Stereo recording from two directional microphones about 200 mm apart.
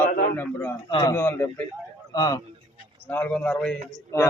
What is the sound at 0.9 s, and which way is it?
Speech, 20° left (ahead or behind).